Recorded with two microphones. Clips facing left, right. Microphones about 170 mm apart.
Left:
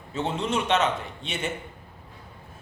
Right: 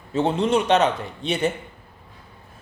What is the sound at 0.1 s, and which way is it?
Speech, 35° right (ahead or behind).